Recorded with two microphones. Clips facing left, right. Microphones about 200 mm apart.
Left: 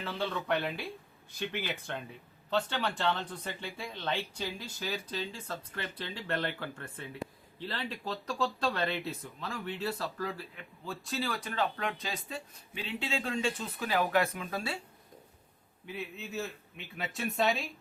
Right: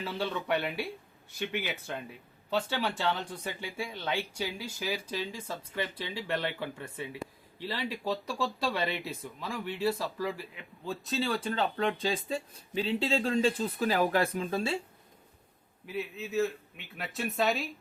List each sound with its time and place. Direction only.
0.0 s speech: 10° right (ahead or behind)
1.9 s speech: 5° right (ahead or behind)
10.8 s speech: 20° right (ahead or behind)
15.9 s speech: centre (ahead or behind)